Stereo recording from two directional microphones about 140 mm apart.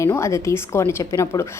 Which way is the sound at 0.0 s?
20° left (ahead or behind).